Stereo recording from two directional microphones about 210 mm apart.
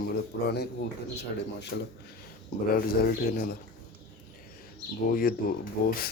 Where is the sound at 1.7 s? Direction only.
50° left (ahead or behind).